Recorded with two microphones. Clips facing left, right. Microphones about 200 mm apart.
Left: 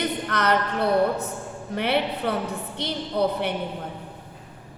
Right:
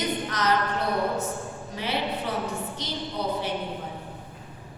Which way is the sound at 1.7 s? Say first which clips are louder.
Left 5 dB; 60° left (ahead or behind).